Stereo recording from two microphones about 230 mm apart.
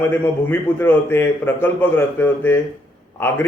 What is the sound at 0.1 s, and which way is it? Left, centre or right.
A man's voice, centre.